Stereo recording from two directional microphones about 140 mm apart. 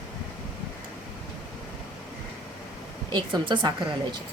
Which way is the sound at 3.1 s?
35° right (ahead or behind).